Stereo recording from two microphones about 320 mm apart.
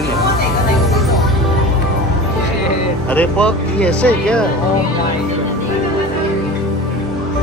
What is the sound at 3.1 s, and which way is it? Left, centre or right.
Speech, centre.